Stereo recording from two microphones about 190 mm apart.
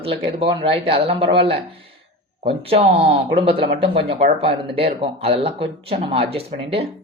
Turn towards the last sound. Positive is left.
turn(degrees=-30)  # may be behind; listen again after turning